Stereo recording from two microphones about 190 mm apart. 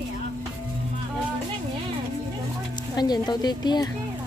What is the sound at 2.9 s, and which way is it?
Speech, 20° left (ahead or behind).